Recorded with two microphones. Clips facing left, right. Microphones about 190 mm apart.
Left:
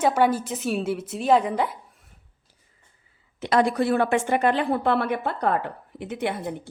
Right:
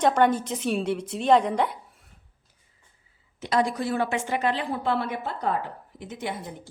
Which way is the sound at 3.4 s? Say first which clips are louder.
Left 4 dB; 65° left (ahead or behind).